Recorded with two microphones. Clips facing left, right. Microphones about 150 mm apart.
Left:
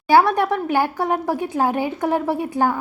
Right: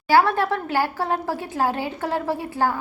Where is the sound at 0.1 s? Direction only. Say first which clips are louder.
Left 3 dB; 15° left (ahead or behind).